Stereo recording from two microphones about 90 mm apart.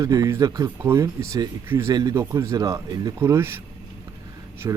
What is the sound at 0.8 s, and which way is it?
Speech, 30° right (ahead or behind).